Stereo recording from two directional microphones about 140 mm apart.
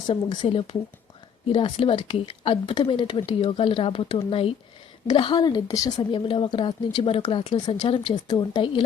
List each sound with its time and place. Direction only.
0.1 s a woman's voice: 40° left (ahead or behind)
6.1 s speech: 40° left (ahead or behind)